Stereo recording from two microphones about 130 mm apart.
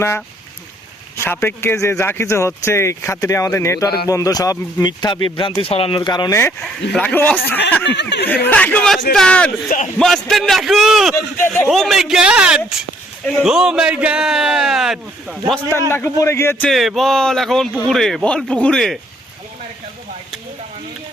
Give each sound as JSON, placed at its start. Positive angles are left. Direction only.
{"t": 1.1, "sound": "a man's voice", "side_deg": 20}
{"t": 5.6, "sound": "speech", "side_deg": 45}
{"t": 6.0, "sound": "speech", "side_deg": 35}
{"t": 6.6, "sound": "speech", "side_deg": 10}
{"t": 9.6, "sound": "speech", "side_deg": 90}
{"t": 10.0, "sound": "a man's voice", "side_deg": 0}
{"t": 15.9, "sound": "a man's voice", "side_deg": 15}
{"t": 16.6, "sound": "a man's voice", "side_deg": 0}